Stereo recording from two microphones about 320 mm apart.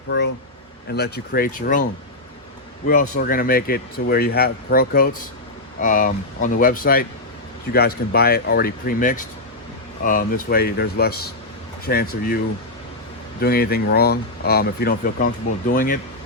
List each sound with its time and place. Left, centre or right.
0.9 s speech: left
13.4 s speech: left